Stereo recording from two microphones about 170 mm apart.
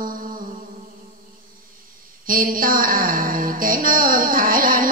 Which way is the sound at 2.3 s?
55° right (ahead or behind).